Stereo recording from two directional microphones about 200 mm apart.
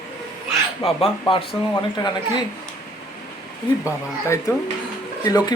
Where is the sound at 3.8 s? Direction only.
15° left (ahead or behind).